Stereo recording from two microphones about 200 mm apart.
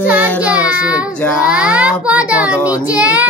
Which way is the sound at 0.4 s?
5° right (ahead or behind).